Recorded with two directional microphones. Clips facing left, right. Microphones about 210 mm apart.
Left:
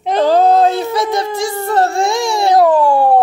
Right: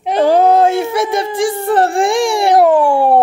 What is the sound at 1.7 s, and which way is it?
Speech, 30° right (ahead or behind).